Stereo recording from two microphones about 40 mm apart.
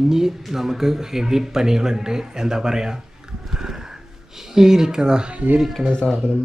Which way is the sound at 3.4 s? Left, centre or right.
Centre.